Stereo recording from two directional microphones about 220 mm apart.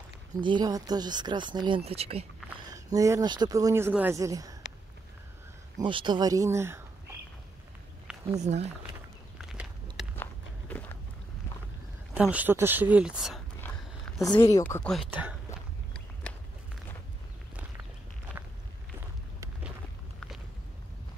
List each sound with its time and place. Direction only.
0.4 s speech: 20° right (ahead or behind)
2.7 s speech: 15° right (ahead or behind)
5.9 s speech: 20° right (ahead or behind)
8.4 s speech: 30° right (ahead or behind)
9.4 s a sound: 5° right (ahead or behind)
12.1 s speech: 5° right (ahead or behind)
13.6 s a sound: 5° left (ahead or behind)
14.2 s speech: 20° left (ahead or behind)
14.6 s speech: 5° left (ahead or behind)
15.0 s speech: 10° right (ahead or behind)
18.9 s run: 10° right (ahead or behind)